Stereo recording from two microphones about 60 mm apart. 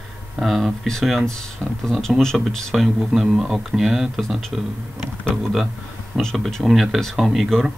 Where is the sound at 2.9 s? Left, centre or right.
Centre.